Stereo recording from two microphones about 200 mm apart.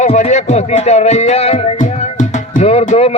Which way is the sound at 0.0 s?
35° left (ahead or behind).